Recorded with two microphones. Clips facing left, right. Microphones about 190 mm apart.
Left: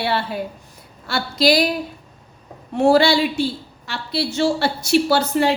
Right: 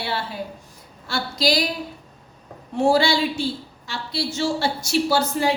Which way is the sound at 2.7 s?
60° left (ahead or behind).